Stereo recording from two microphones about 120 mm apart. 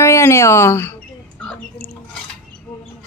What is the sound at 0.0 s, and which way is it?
Speech, 25° left (ahead or behind).